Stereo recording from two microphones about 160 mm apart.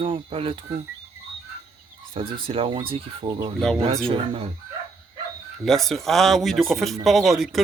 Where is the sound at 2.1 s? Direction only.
35° right (ahead or behind).